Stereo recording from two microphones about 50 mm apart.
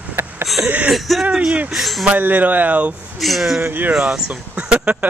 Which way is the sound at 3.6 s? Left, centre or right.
Right.